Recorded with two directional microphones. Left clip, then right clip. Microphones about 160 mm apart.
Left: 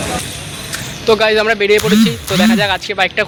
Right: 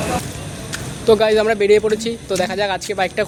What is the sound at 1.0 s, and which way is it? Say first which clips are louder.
Speech: left 2 dB; 15° right (ahead or behind).